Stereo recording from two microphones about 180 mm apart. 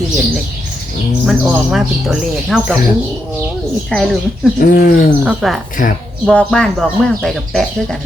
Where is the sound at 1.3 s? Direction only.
Centre (ahead or behind).